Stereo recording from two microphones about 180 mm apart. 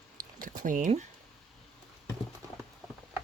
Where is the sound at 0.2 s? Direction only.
50° right (ahead or behind).